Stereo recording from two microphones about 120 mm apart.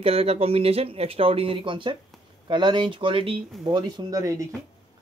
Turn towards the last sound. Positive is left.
turn(degrees=-30)  # may be behind; listen again after turning